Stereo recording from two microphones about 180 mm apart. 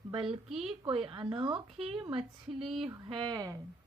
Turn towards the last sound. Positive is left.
turn(degrees=-20)  # may be behind; listen again after turning